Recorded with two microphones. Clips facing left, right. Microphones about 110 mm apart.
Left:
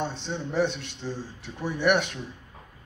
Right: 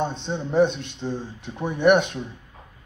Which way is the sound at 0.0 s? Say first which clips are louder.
Right 4 dB; 20° right (ahead or behind).